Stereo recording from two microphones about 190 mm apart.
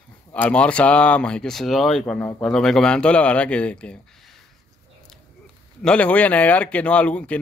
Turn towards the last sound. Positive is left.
turn(degrees=5)  # may be behind; listen again after turning